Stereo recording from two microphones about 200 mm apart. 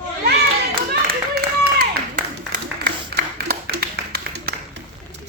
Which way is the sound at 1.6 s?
45° right (ahead or behind).